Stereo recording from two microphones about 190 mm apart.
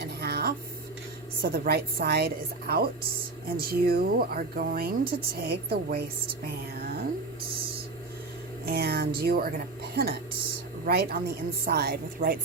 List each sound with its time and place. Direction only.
0.0 s a sound: 55° right (ahead or behind)
1.4 s speech: 55° right (ahead or behind)
8.6 s speech: 55° right (ahead or behind)